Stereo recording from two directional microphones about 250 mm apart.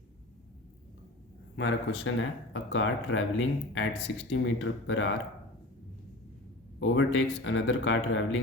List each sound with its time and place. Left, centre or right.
1.5 s speech: left
6.7 s speech: left